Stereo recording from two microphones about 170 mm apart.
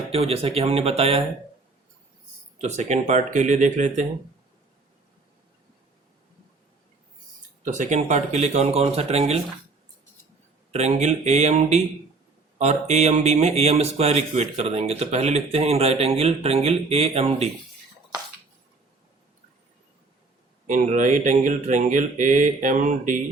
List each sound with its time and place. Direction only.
0.1 s speech: 35° right (ahead or behind)
2.6 s speech: 40° right (ahead or behind)
7.6 s speech: 45° right (ahead or behind)
10.7 s speech: 40° right (ahead or behind)
20.7 s speech: 50° right (ahead or behind)